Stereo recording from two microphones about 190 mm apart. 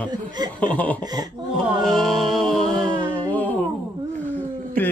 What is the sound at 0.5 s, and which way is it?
Speech, 5° left (ahead or behind).